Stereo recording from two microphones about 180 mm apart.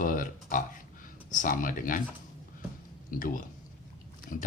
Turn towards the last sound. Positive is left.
turn(degrees=55)  # may be behind; listen again after turning